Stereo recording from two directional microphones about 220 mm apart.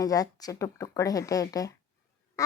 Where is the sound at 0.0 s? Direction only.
15° left (ahead or behind).